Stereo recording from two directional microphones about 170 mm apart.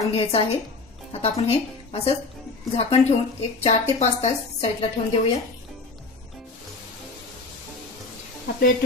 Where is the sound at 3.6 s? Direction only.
40° left (ahead or behind).